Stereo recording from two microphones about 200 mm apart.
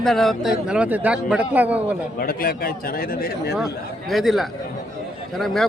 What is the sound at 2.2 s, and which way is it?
A man's voice, 50° left (ahead or behind).